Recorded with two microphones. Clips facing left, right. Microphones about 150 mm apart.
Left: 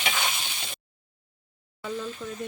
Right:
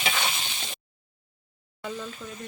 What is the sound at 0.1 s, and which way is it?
Stir, centre (ahead or behind).